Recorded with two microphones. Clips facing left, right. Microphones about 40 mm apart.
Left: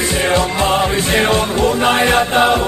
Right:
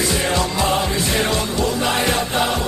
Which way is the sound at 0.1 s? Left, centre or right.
Left.